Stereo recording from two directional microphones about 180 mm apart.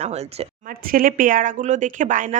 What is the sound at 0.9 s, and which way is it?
A woman's voice, 50° right (ahead or behind).